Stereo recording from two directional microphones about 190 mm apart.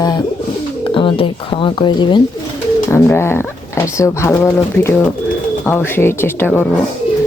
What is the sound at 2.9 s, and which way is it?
Speech, 15° left (ahead or behind).